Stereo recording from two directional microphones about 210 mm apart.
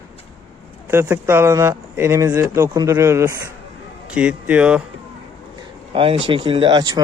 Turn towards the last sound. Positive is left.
turn(degrees=-20)  # may be behind; listen again after turning